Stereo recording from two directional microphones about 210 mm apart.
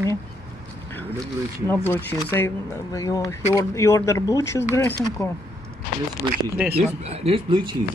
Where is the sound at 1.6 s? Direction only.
10° left (ahead or behind).